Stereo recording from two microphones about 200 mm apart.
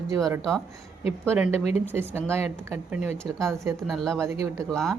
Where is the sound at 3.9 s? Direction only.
Centre (ahead or behind).